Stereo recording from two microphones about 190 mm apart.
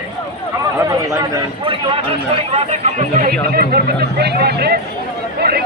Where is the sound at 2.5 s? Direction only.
35° right (ahead or behind).